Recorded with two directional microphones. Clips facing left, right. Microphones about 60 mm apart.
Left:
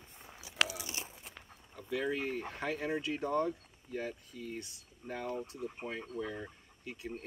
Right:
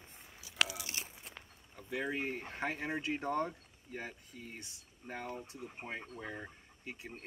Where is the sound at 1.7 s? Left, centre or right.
Right.